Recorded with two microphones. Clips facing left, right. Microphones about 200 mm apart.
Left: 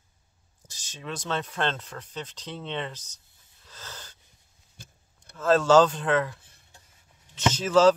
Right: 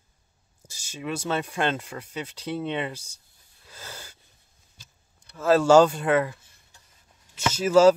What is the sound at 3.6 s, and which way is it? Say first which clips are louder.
Wheeze: right 2 dB; 10° right (ahead or behind).